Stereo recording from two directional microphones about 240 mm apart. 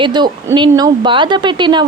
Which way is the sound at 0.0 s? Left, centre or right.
Centre.